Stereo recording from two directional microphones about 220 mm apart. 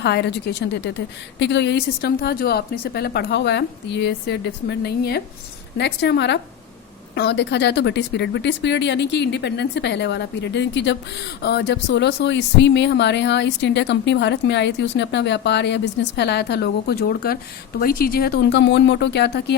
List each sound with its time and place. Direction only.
0.0 s speech: 50° left (ahead or behind)